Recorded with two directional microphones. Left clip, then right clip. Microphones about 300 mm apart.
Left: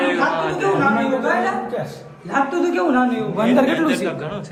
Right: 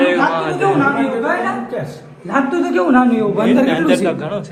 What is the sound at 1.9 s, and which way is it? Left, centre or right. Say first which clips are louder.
A man's voice: right 4 dB; right.